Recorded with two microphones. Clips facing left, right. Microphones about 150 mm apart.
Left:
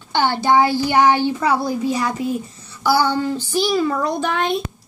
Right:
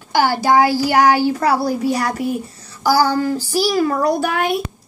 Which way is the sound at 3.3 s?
10° right (ahead or behind).